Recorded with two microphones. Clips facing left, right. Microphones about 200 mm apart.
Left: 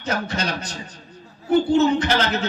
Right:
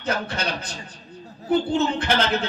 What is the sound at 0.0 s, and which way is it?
Speech, 55° right (ahead or behind).